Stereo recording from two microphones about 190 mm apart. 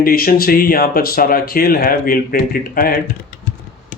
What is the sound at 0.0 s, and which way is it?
Speech, 50° left (ahead or behind).